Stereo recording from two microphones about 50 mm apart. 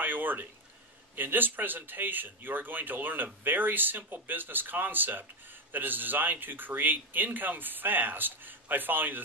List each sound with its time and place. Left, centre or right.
0.0 s speech: right